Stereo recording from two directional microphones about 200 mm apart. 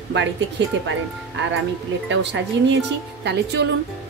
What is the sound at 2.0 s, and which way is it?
A woman's voice, 65° right (ahead or behind).